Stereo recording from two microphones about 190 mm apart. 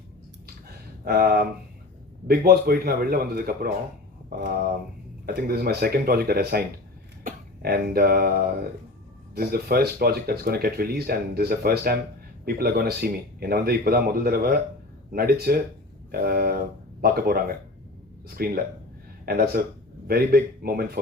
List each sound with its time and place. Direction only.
1.0 s speech: 50° right (ahead or behind)